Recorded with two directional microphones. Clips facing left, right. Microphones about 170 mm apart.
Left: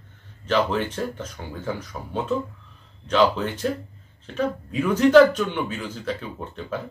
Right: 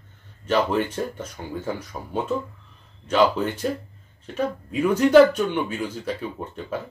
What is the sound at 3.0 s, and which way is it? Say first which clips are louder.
Speech: even; 10° right (ahead or behind).